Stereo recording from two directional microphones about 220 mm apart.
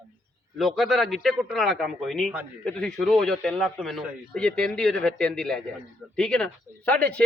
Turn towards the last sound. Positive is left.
turn(degrees=5)  # may be behind; listen again after turning